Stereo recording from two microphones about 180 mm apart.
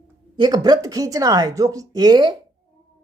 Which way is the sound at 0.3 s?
25° right (ahead or behind).